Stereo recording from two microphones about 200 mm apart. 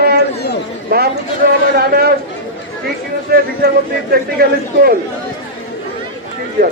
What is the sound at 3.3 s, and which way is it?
Speech, 50° right (ahead or behind).